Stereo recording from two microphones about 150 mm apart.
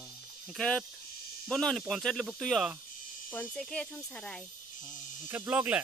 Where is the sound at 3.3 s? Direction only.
10° left (ahead or behind).